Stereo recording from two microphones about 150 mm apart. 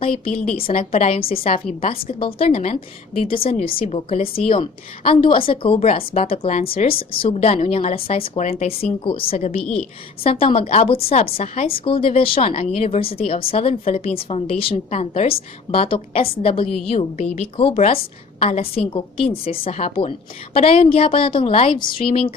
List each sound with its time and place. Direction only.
0.7 s a woman's voice: 45° left (ahead or behind)
17.2 s a woman's voice: 50° left (ahead or behind)
17.6 s a woman's voice: 40° left (ahead or behind)